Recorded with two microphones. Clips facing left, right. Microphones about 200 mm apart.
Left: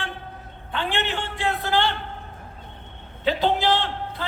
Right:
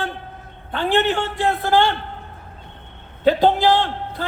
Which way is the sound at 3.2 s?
45° right (ahead or behind).